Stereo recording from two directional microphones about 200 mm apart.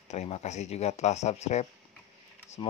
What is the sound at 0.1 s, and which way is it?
Speech, 35° left (ahead or behind).